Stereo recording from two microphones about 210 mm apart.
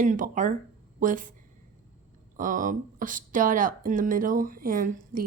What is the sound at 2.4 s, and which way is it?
Speech, 40° right (ahead or behind).